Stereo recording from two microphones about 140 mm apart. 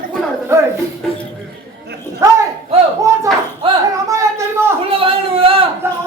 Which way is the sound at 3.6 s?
40° right (ahead or behind).